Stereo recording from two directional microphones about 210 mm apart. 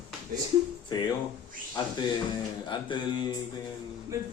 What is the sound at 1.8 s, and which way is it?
Speech, 20° left (ahead or behind).